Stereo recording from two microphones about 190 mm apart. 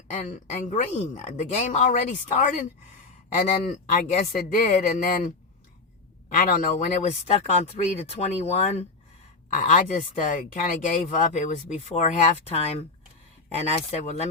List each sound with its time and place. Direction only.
0.1 s speech: 35° left (ahead or behind)
7.1 s speech: 35° left (ahead or behind)